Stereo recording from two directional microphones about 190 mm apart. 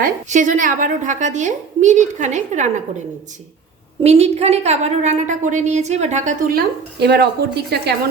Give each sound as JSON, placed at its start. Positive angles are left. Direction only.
{"t": 0.0, "sound": "a woman's voice", "side_deg": -40}
{"t": 4.0, "sound": "a woman's voice", "side_deg": -35}